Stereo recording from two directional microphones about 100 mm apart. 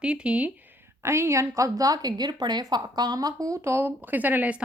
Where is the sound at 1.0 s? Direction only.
25° right (ahead or behind).